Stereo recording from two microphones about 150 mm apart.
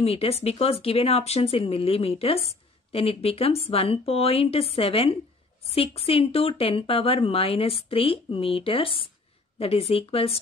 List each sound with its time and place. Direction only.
0.0 s speech: 40° left (ahead or behind)